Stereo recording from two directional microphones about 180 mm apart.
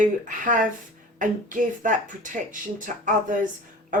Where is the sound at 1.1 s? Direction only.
45° right (ahead or behind).